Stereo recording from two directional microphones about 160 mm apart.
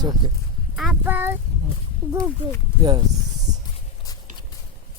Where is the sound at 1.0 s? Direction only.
10° right (ahead or behind).